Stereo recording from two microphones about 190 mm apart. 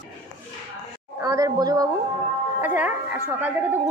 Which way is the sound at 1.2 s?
20° right (ahead or behind).